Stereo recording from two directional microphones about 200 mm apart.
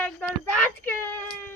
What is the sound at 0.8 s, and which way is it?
Speech, 10° left (ahead or behind).